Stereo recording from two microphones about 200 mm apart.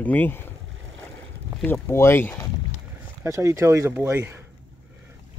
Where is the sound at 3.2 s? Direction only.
15° right (ahead or behind).